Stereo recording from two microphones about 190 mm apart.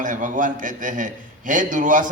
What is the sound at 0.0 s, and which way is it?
A man's voice, 45° right (ahead or behind).